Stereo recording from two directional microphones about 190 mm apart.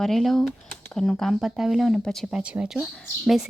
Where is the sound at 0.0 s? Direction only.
Centre (ahead or behind).